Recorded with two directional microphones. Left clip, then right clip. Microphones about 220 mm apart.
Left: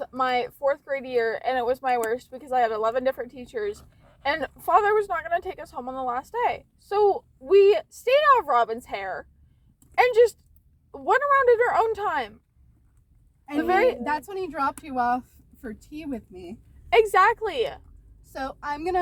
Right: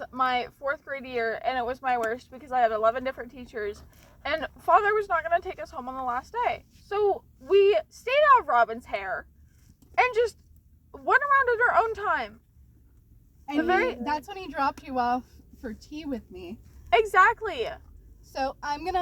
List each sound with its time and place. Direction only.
0.0 s speech: 5° right (ahead or behind)
13.6 s speech: 10° right (ahead or behind)
14.1 s a woman's voice: 25° left (ahead or behind)
16.9 s speech: 10° right (ahead or behind)
18.3 s a woman's voice: 30° left (ahead or behind)